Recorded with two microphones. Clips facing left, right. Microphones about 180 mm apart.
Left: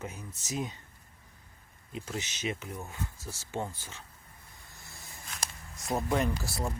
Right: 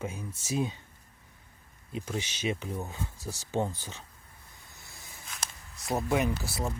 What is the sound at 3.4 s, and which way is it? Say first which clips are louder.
Speech: right 5 dB; 20° right (ahead or behind).